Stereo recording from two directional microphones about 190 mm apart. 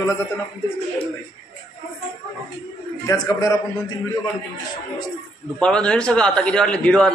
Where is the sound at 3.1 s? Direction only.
15° left (ahead or behind).